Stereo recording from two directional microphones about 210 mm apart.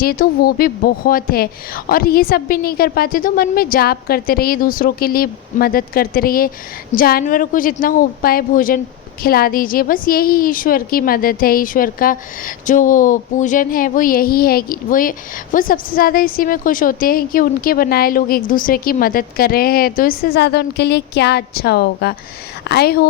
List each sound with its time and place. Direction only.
0.0 s a woman's voice: 45° left (ahead or behind)